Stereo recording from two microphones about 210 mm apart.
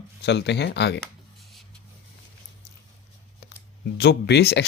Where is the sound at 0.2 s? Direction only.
55° left (ahead or behind).